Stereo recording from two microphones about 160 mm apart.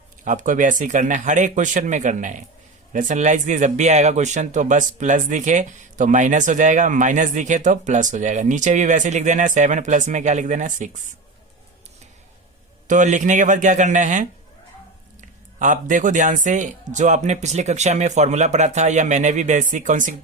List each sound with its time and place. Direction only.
0.3 s speech: 55° right (ahead or behind)
12.9 s speech: 50° right (ahead or behind)
15.5 s speech: 50° right (ahead or behind)